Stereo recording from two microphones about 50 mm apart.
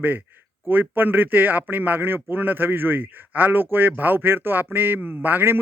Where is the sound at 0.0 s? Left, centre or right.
Right.